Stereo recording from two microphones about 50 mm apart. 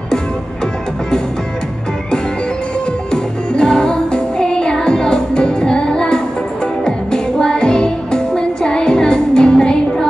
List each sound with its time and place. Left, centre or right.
3.1 s music: centre